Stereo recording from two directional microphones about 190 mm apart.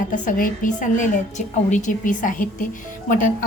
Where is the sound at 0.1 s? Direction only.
45° left (ahead or behind).